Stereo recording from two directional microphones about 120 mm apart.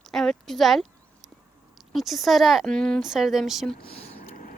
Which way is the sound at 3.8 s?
60° left (ahead or behind).